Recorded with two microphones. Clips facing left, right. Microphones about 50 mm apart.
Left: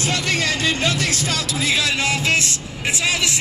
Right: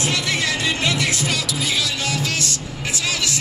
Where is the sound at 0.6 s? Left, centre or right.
Left.